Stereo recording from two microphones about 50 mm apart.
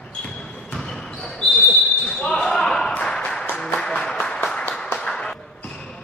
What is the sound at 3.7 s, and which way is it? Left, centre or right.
Applause, left.